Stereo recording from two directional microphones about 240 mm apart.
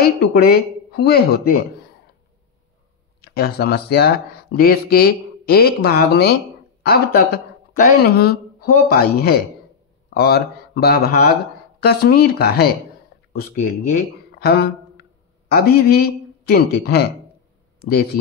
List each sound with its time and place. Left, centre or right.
0.0 s speech: left
3.2 s a man's voice: left